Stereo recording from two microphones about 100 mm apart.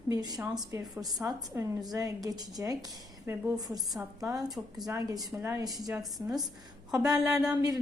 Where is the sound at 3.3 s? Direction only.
20° right (ahead or behind).